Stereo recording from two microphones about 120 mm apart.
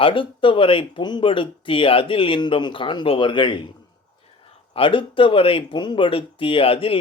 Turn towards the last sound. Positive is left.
turn(degrees=50)  # may be behind; listen again after turning